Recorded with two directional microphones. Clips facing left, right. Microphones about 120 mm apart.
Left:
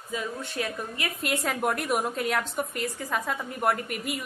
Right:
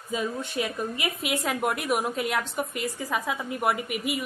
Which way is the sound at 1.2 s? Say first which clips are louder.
Left 1 dB; 5° right (ahead or behind).